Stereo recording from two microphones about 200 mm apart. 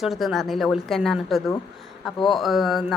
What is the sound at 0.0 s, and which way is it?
A woman's voice, centre (ahead or behind).